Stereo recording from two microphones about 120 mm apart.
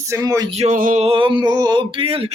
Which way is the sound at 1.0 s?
45° right (ahead or behind).